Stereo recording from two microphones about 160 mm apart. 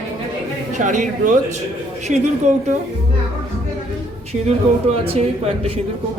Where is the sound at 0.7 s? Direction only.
50° right (ahead or behind).